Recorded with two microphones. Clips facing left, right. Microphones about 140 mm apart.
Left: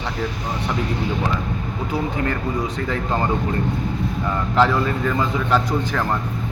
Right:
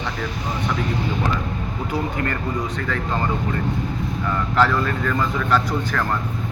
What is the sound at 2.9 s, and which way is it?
Speech, 25° left (ahead or behind).